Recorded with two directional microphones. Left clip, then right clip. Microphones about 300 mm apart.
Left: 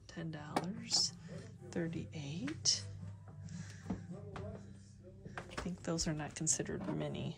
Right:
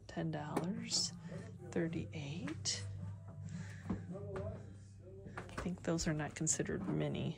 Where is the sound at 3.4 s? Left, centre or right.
Centre.